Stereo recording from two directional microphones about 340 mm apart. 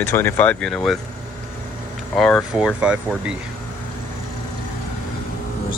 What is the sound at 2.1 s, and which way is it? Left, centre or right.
Speech, centre.